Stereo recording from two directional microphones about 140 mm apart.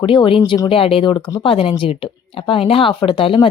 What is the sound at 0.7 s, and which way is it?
Speech, 40° left (ahead or behind).